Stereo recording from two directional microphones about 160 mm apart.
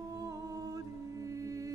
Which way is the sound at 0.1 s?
20° right (ahead or behind).